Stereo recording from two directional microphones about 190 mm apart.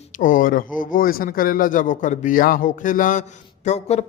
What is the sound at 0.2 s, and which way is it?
A man's voice, 45° left (ahead or behind).